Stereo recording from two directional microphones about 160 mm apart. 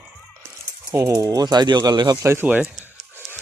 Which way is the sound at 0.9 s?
20° right (ahead or behind).